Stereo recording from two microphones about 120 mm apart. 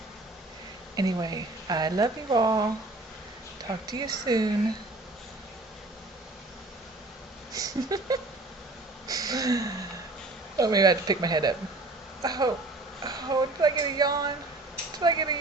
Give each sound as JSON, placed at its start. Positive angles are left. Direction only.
{"t": 0.9, "sound": "speech", "side_deg": -35}
{"t": 3.7, "sound": "speech", "side_deg": -35}
{"t": 7.5, "sound": "a sound", "side_deg": -30}
{"t": 9.0, "sound": "gasp", "side_deg": -30}
{"t": 10.6, "sound": "speech", "side_deg": -30}